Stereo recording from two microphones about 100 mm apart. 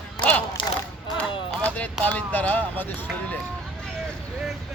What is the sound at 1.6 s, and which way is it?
Speech, 15° left (ahead or behind).